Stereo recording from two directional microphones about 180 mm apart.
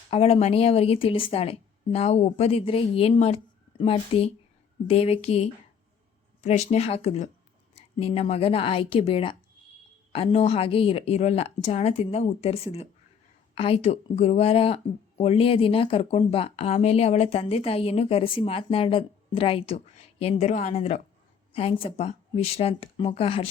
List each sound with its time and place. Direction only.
0.1 s speech: 35° left (ahead or behind)